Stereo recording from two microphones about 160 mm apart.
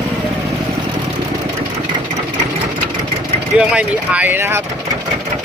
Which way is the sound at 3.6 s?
10° right (ahead or behind).